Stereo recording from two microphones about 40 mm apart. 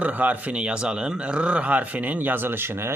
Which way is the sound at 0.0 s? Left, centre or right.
Right.